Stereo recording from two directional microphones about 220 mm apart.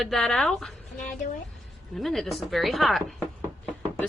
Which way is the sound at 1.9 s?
Centre (ahead or behind).